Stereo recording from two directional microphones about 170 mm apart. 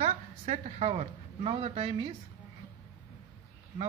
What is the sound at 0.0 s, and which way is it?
A woman's voice, 40° right (ahead or behind).